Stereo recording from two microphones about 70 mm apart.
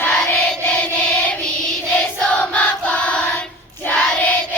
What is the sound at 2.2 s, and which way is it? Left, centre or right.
Choir, centre.